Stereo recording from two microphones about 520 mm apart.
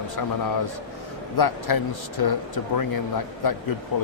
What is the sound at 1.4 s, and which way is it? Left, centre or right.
Speech, left.